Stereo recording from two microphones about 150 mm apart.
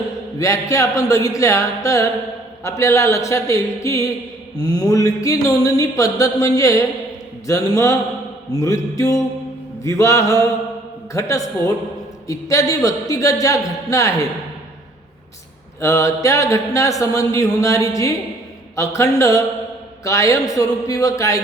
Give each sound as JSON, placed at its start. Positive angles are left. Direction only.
{"t": 0.3, "sound": "speech", "side_deg": 20}
{"t": 15.8, "sound": "speech", "side_deg": 20}